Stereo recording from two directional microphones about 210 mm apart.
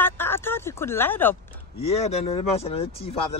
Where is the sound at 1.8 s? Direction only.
30° left (ahead or behind).